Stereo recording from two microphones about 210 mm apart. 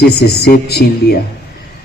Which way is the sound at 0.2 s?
50° left (ahead or behind).